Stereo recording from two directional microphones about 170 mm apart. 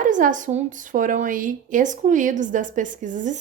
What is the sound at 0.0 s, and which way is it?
A woman's voice, 50° right (ahead or behind).